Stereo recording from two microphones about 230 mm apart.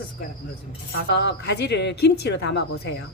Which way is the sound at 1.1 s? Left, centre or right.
Left.